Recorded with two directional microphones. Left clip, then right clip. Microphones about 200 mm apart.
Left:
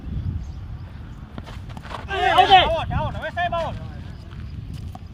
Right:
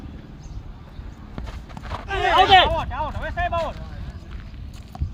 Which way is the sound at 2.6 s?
60° left (ahead or behind).